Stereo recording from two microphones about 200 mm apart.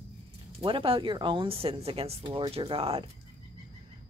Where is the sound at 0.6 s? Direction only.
25° right (ahead or behind).